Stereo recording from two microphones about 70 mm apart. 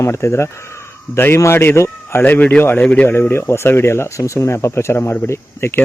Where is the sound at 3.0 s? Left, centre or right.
Left.